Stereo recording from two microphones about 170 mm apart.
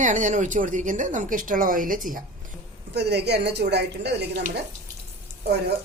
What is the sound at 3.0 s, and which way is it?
Speech, 75° right (ahead or behind).